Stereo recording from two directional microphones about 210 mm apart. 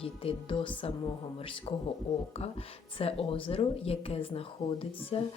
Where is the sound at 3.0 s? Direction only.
25° left (ahead or behind).